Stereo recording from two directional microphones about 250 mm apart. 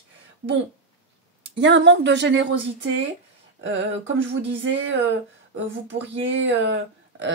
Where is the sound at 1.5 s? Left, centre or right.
Right.